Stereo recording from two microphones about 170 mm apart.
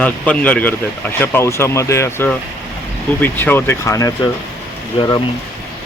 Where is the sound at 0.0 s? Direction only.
5° left (ahead or behind).